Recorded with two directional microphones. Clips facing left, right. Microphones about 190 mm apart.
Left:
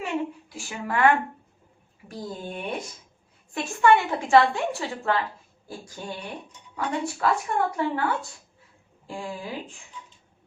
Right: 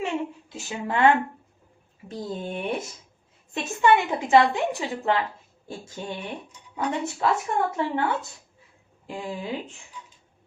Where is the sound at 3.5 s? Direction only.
20° right (ahead or behind).